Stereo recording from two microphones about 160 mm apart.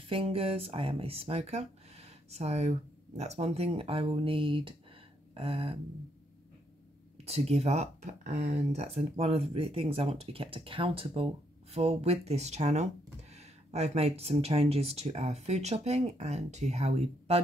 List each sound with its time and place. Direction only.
0.1 s speech: 35° right (ahead or behind)
5.3 s a sound: 40° right (ahead or behind)
7.2 s speech: 40° right (ahead or behind)